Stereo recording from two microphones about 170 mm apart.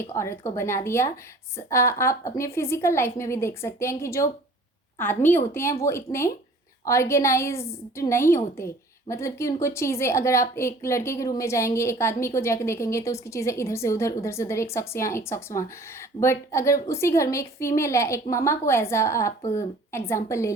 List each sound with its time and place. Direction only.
0.0 s a woman's voice: 15° left (ahead or behind)